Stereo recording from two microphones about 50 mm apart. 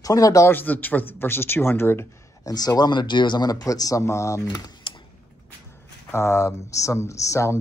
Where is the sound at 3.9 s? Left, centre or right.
Left.